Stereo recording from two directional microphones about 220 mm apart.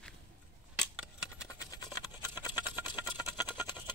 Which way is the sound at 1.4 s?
15° left (ahead or behind).